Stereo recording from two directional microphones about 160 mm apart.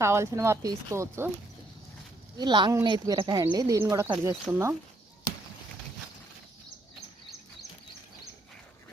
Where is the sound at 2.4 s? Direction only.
25° right (ahead or behind).